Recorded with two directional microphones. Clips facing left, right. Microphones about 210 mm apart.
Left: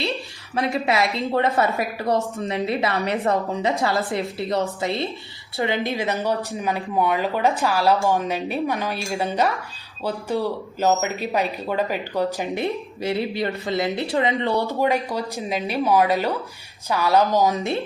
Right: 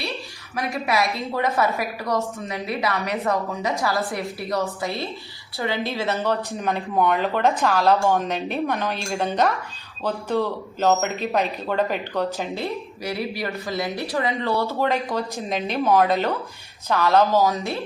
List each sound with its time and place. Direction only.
0.5 s speech: 25° left (ahead or behind)
6.5 s speech: 5° left (ahead or behind)